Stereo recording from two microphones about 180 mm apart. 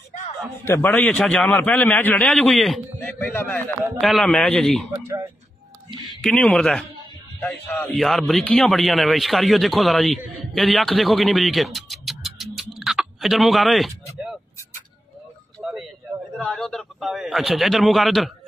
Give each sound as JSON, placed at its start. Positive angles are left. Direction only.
{"t": 0.7, "sound": "a man's voice", "side_deg": 15}
{"t": 4.9, "sound": "speech", "side_deg": -15}
{"t": 6.2, "sound": "a man's voice", "side_deg": 5}
{"t": 15.6, "sound": "a sound", "side_deg": -5}
{"t": 16.3, "sound": "a man's voice", "side_deg": 5}